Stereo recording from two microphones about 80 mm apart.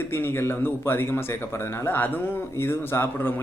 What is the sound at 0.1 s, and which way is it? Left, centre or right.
A man's voice, left.